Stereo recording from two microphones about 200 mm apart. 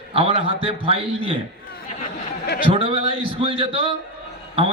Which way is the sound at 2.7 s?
25° right (ahead or behind).